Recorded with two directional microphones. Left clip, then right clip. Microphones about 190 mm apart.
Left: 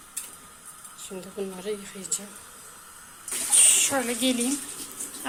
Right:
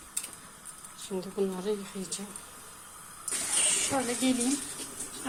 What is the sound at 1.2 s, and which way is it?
Speech, 45° right (ahead or behind).